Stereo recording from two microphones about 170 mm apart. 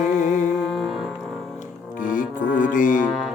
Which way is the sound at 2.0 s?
50° left (ahead or behind).